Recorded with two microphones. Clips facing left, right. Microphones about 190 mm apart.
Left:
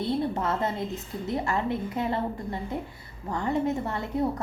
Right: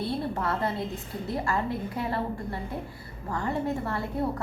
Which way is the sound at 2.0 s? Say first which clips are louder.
Left 2 dB; 20° left (ahead or behind).